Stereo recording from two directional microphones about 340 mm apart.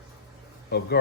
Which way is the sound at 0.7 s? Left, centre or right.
Left.